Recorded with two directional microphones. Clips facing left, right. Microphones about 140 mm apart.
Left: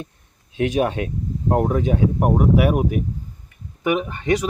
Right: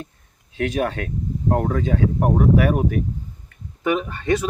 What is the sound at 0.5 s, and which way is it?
Speech, 15° left (ahead or behind).